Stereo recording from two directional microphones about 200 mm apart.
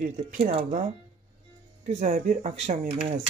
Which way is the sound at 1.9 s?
35° right (ahead or behind).